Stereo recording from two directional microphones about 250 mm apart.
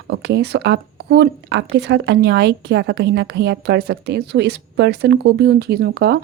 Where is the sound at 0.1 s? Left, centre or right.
Right.